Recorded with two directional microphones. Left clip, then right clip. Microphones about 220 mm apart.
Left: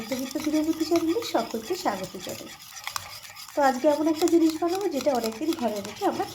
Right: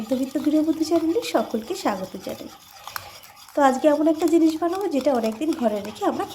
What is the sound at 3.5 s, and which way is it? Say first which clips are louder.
A woman's voice: right 4 dB; 20° right (ahead or behind).